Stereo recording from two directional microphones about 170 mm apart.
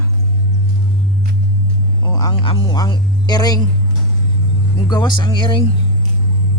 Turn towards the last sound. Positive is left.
turn(degrees=30)  # may be behind; listen again after turning